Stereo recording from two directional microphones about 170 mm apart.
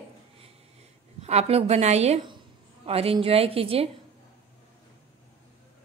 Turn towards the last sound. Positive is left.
turn(degrees=-35)  # may be behind; listen again after turning